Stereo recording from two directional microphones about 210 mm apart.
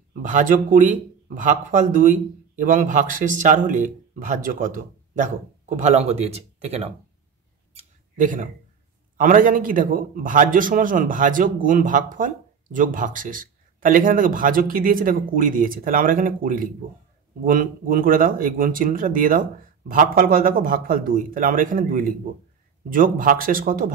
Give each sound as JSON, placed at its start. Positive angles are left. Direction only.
{"t": 0.1, "sound": "speech", "side_deg": -40}
{"t": 7.7, "sound": "a sound", "side_deg": -40}
{"t": 9.1, "sound": "speech", "side_deg": -40}